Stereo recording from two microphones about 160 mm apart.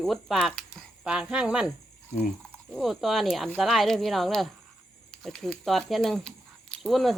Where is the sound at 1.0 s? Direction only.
5° right (ahead or behind).